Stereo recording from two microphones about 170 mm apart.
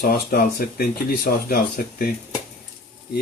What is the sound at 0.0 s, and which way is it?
Speech, 65° left (ahead or behind).